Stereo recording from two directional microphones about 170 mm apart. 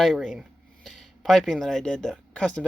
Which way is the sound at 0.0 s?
Centre (ahead or behind).